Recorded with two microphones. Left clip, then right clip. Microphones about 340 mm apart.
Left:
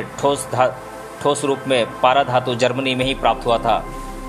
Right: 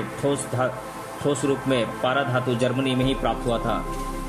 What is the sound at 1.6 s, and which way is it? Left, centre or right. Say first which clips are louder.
Speech: left 10 dB; centre.